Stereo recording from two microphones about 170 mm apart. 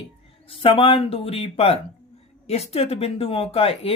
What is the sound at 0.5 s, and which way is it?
Speech, 30° left (ahead or behind).